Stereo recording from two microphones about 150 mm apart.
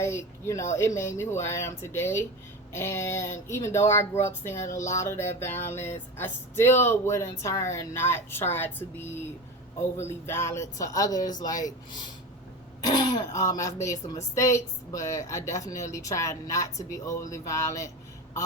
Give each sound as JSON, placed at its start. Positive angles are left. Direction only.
{"t": 0.0, "sound": "speech", "side_deg": 20}